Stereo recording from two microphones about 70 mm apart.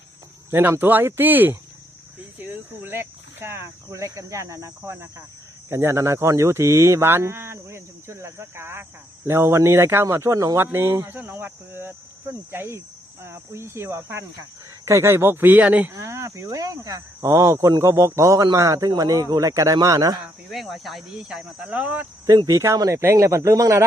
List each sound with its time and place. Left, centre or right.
0.5 s speech: right
2.4 s cricket: right
2.8 s speech: right
3.8 s speech: right
10.6 s speech: right; by 15.9 s centre
15.9 s speech: right
18.9 s speech: right
20.5 s cricket: centre
22.3 s speech: right